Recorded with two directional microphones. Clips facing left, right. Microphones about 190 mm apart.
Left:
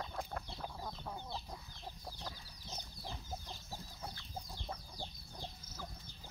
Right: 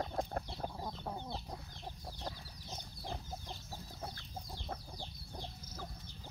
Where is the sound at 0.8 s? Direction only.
20° right (ahead or behind).